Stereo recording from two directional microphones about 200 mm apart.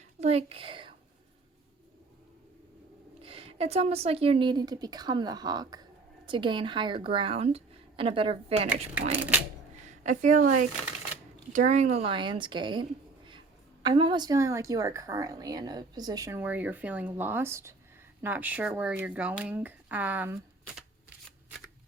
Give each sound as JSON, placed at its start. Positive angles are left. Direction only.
{"t": 0.2, "sound": "a woman's voice", "side_deg": -30}
{"t": 3.2, "sound": "speech", "side_deg": -30}
{"t": 10.0, "sound": "a woman's voice", "side_deg": -40}